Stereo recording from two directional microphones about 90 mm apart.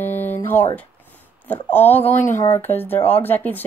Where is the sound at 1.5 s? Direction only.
20° left (ahead or behind).